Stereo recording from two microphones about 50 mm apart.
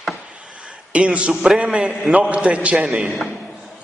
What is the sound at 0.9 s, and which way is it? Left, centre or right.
A man's voice, right.